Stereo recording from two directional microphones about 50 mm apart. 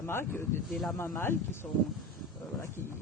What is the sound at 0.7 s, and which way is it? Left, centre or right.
Speech, centre.